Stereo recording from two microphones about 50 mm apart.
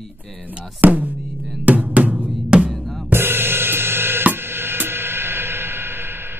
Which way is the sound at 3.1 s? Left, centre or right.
Right.